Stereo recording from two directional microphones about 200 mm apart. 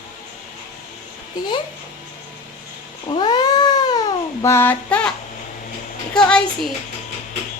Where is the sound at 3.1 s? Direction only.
20° left (ahead or behind).